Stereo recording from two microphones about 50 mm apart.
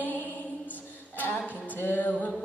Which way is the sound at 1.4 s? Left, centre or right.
Left.